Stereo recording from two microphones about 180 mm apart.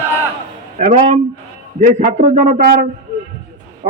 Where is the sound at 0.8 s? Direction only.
40° right (ahead or behind).